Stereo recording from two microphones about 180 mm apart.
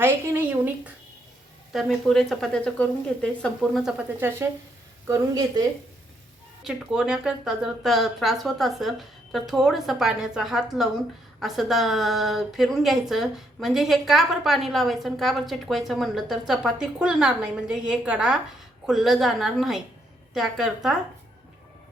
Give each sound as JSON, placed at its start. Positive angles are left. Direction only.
{"t": 0.0, "sound": "a sound", "side_deg": -10}
{"t": 1.7, "sound": "a woman's voice", "side_deg": 0}
{"t": 6.7, "sound": "a woman's voice", "side_deg": -5}